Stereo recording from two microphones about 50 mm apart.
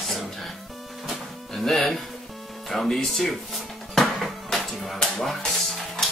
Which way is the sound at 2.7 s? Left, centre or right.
Centre.